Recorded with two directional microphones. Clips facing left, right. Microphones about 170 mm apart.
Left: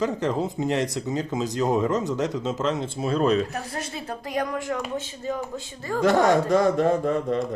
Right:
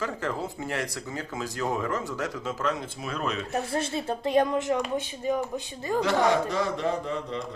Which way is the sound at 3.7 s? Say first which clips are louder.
Right 4 dB; 30° right (ahead or behind).